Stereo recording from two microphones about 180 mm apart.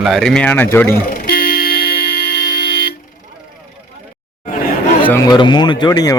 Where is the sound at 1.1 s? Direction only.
55° left (ahead or behind).